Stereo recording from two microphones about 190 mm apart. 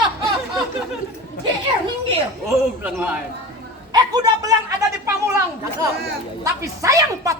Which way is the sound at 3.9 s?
20° right (ahead or behind).